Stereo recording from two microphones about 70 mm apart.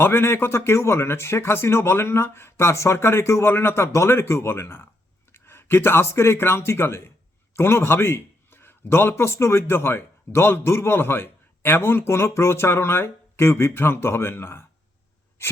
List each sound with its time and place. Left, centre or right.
0.0 s a man's voice: left